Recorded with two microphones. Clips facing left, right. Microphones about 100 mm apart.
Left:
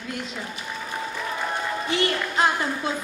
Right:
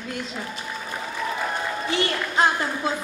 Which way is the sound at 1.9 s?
30° right (ahead or behind).